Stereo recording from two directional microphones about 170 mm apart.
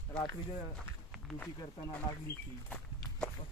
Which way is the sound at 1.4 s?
10° left (ahead or behind).